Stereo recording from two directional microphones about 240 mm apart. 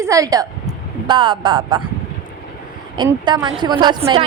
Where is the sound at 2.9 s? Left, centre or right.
Centre.